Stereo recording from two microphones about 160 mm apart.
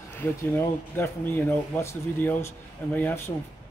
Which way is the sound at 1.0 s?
15° left (ahead or behind).